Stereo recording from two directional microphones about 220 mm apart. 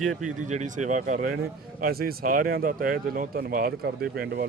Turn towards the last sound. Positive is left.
turn(degrees=-45)  # may be behind; listen again after turning